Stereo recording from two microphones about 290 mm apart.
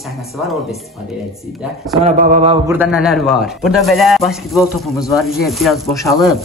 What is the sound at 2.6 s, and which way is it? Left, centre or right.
A man's voice, centre.